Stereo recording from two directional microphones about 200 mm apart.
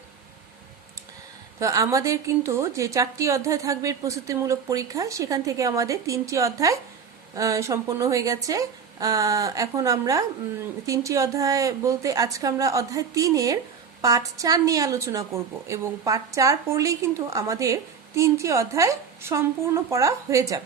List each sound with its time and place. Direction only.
1.5 s a woman's voice: 15° right (ahead or behind)